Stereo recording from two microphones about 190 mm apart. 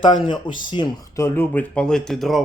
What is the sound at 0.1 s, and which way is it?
A man's voice, 25° left (ahead or behind).